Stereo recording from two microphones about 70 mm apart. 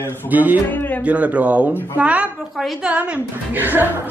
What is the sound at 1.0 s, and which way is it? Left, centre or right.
Speech, centre.